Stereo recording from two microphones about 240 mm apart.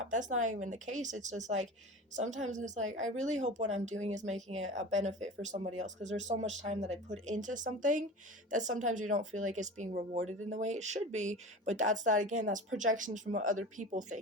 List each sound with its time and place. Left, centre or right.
0.1 s speech: right